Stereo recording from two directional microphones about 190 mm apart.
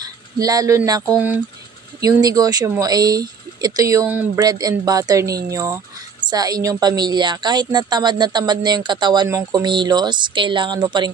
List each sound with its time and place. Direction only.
0.0 s a woman's voice: 20° right (ahead or behind)